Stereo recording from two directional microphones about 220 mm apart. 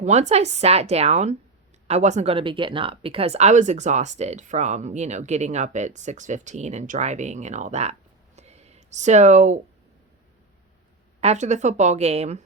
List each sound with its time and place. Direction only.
0.0 s speech: 30° right (ahead or behind)
8.4 s a sound: 30° right (ahead or behind)
11.2 s speech: 30° right (ahead or behind)